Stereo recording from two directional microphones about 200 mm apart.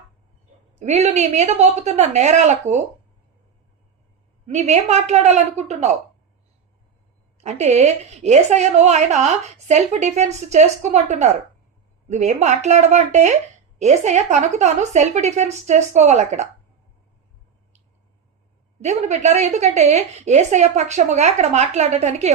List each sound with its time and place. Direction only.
0.8 s a woman's voice: 35° right (ahead or behind)
4.4 s a woman's voice: 35° right (ahead or behind)
7.3 s a woman's voice: 35° right (ahead or behind)
18.8 s a woman's voice: 35° right (ahead or behind)